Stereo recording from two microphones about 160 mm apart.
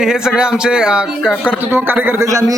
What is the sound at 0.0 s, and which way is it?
Speech, 5° right (ahead or behind).